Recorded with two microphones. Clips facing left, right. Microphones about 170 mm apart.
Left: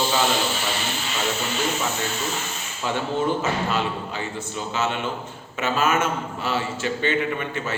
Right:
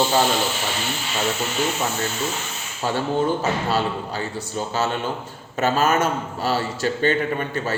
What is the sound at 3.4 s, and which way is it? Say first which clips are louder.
A man's voice: right 2 dB; 40° right (ahead or behind).